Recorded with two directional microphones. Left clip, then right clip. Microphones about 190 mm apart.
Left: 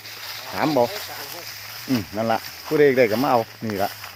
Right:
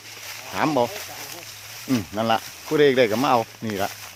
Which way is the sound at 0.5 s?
5° right (ahead or behind).